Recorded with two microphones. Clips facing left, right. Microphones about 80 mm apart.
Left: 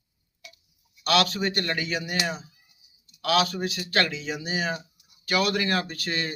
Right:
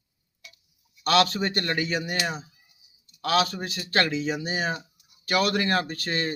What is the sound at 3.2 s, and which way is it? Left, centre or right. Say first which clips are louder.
Speech: even; right.